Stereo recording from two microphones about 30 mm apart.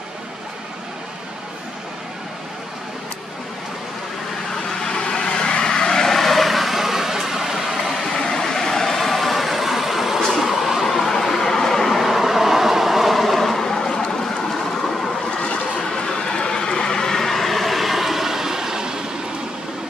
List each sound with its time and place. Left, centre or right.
4.8 s vehicle: left
6.1 s vehicle: centre
8.1 s vehicle: centre
12.0 s train: centre
13.2 s vehicle: centre
13.6 s a sound: centre
16.1 s vehicle: left; by 19.0 s right